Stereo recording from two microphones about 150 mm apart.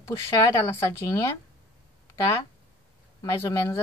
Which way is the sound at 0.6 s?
20° left (ahead or behind).